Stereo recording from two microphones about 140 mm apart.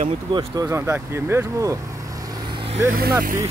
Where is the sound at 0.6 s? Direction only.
20° right (ahead or behind).